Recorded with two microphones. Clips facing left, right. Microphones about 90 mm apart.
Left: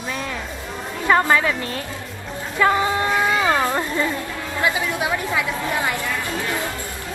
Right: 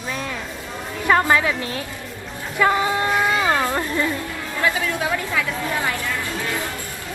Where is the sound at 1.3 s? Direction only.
10° right (ahead or behind).